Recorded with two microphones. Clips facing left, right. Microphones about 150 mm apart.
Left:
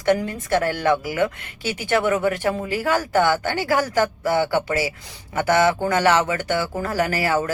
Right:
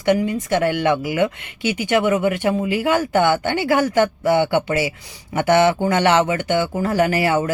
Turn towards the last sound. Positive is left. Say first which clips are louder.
# right 4 dB
turn(degrees=-25)  # may be behind; listen again after turning